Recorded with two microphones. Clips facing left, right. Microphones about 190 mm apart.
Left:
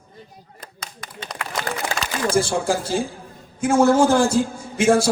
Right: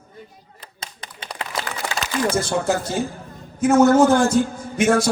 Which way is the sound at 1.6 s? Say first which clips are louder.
Left 2 dB; 35° left (ahead or behind).